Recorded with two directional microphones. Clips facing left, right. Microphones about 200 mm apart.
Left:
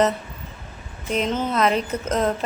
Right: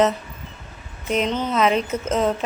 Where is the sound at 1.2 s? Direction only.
5° left (ahead or behind).